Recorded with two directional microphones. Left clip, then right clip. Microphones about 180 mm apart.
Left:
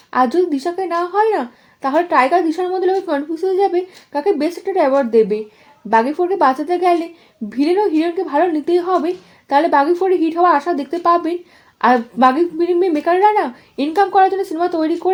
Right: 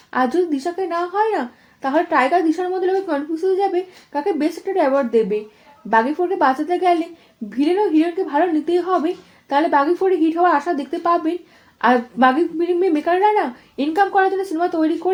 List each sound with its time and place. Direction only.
0.1 s a woman's voice: 35° left (ahead or behind)